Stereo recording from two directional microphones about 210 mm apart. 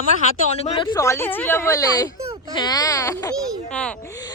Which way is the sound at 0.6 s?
25° left (ahead or behind).